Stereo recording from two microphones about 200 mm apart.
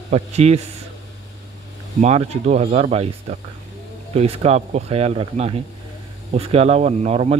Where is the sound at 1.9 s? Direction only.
35° right (ahead or behind).